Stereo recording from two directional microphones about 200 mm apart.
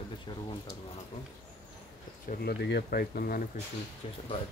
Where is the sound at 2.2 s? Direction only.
50° left (ahead or behind).